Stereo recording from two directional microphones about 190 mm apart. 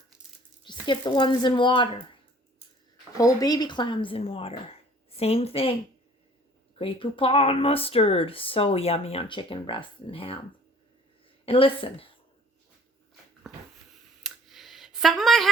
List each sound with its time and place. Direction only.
0.6 s speech: 25° left (ahead or behind)
3.2 s a woman's voice: 20° left (ahead or behind)
6.7 s speech: 30° left (ahead or behind)
11.4 s speech: 30° left (ahead or behind)
13.5 s wheeze: centre (ahead or behind)
14.3 s a sound: centre (ahead or behind)